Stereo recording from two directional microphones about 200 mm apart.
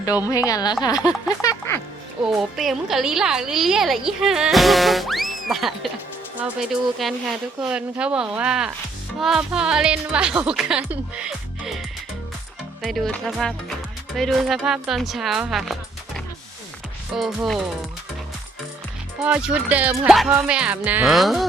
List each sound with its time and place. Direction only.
0.3 s a woman's voice: 15° left (ahead or behind)
2.2 s a woman's voice: centre (ahead or behind)
12.8 s a woman's voice: centre (ahead or behind)
19.2 s a woman's voice: 5° right (ahead or behind)